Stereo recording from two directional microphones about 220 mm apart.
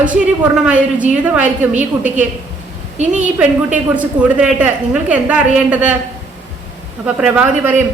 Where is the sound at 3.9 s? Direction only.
5° right (ahead or behind).